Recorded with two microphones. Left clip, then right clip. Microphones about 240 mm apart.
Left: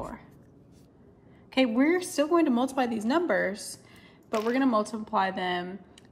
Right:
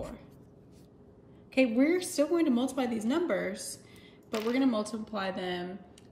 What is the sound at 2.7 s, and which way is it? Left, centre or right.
Speech, centre.